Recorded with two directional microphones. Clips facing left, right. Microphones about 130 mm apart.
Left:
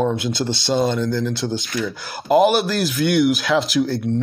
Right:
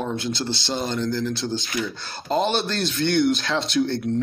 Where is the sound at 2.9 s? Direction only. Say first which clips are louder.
Left 3 dB; 25° right (ahead or behind).